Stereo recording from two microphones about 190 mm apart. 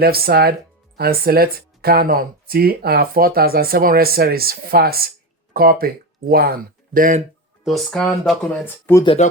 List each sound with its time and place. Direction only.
0.0 s speech: 55° right (ahead or behind)
7.6 s speech: centre (ahead or behind)